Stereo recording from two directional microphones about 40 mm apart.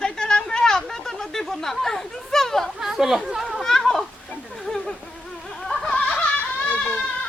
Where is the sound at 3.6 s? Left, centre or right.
Centre.